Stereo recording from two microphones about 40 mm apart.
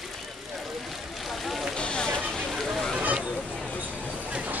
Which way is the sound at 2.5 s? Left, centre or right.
Centre.